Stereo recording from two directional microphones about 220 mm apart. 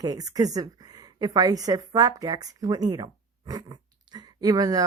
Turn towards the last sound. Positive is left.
turn(degrees=-15)  # may be behind; listen again after turning